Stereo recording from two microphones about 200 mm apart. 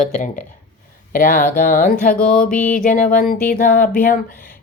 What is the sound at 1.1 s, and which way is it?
Speech, 45° left (ahead or behind).